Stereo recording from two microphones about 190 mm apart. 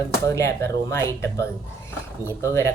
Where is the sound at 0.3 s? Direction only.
15° left (ahead or behind).